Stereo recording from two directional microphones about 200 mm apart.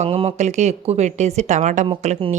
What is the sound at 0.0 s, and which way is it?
Speech, 30° right (ahead or behind).